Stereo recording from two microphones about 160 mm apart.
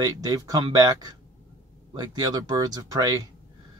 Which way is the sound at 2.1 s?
25° right (ahead or behind).